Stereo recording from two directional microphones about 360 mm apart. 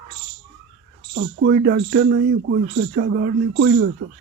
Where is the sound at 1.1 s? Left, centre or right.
Right.